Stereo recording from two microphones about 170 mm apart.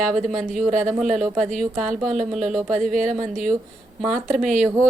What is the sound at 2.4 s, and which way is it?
Speech, 5° right (ahead or behind).